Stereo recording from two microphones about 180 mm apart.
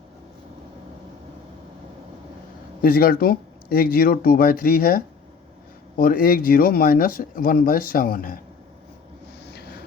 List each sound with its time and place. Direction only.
2.8 s speech: 55° left (ahead or behind)